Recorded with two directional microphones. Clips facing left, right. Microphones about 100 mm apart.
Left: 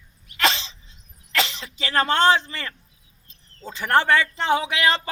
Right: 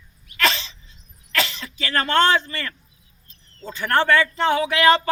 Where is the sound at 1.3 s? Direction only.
25° left (ahead or behind).